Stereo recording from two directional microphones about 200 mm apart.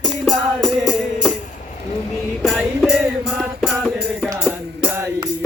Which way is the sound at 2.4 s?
Centre (ahead or behind).